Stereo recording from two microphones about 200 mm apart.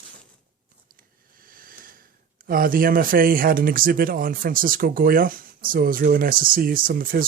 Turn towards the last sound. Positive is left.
turn(degrees=-45)  # may be behind; listen again after turning